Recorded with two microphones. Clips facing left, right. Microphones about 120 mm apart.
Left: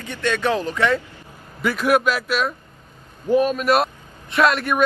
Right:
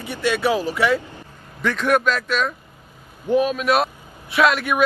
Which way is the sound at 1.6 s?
5° left (ahead or behind).